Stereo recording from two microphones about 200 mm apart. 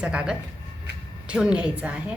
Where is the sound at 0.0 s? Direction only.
5° right (ahead or behind).